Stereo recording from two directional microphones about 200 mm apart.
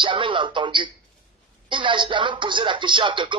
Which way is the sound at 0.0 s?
25° right (ahead or behind).